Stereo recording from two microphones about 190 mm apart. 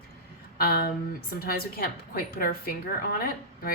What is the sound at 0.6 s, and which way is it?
A woman's voice, 55° left (ahead or behind).